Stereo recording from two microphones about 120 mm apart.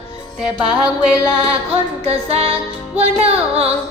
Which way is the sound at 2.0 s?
60° right (ahead or behind).